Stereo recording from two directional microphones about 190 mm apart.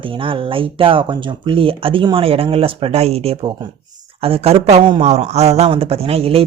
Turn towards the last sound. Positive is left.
turn(degrees=-30)  # may be behind; listen again after turning